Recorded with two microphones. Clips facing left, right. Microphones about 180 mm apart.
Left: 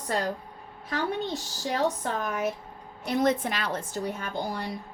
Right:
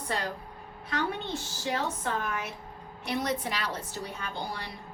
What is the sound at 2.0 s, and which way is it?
A woman's voice, 40° left (ahead or behind).